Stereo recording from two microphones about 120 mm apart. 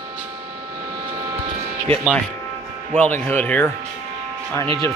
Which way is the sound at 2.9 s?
10° left (ahead or behind).